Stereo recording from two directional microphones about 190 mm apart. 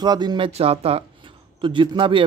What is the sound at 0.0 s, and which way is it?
Speech, 20° right (ahead or behind).